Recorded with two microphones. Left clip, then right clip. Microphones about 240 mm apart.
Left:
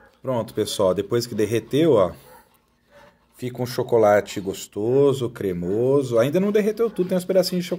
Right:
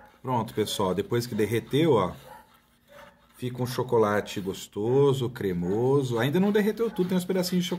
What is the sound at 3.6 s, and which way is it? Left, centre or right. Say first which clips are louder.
Speech: left 7 dB; centre.